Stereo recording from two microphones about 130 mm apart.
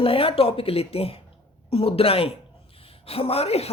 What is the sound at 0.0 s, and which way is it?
A woman's voice, 45° left (ahead or behind).